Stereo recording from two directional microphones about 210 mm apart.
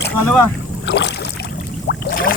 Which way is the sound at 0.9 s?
55° left (ahead or behind).